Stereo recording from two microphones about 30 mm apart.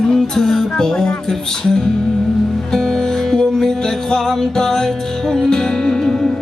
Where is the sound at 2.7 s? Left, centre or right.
Centre.